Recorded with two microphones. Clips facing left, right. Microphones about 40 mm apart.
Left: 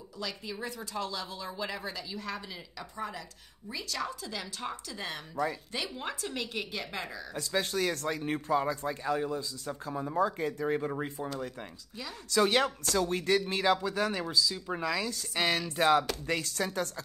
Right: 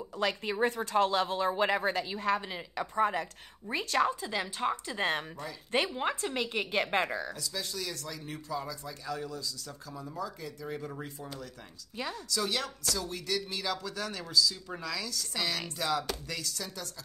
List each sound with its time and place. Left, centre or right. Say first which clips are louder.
0.2 s a woman's voice: right 8 dB; right
4.9 s a woman's voice: right 8 dB; right
5.9 s a woman's voice: right 4 dB; right
7.3 s speech: left 7 dB; left
12.3 s speech: left 9 dB; left